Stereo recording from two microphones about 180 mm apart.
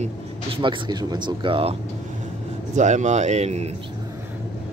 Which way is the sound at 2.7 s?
40° right (ahead or behind).